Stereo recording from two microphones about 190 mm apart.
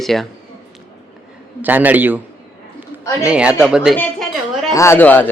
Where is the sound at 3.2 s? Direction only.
5° right (ahead or behind).